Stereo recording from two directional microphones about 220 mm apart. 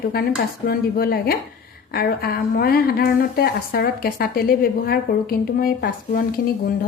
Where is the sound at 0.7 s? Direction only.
45° left (ahead or behind).